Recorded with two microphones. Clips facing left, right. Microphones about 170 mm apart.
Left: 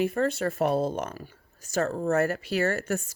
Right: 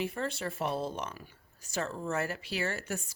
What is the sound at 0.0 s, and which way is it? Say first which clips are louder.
Speech: left 9 dB; 50° left (ahead or behind).